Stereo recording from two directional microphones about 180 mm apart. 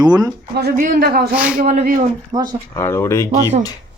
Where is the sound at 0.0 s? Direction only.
20° right (ahead or behind).